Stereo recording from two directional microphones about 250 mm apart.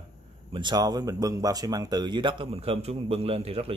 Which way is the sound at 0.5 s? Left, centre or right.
Centre.